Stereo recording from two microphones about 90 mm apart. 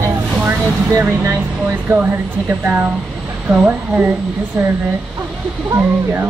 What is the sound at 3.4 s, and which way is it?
Speech, 20° right (ahead or behind).